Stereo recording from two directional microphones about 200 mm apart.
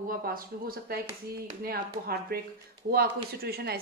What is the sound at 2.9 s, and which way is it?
Speech, 50° right (ahead or behind).